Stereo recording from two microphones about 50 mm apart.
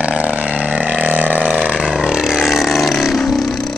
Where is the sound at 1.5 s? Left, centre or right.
Centre.